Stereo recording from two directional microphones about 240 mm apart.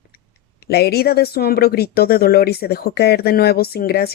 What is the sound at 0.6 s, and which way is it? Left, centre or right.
Speech, left.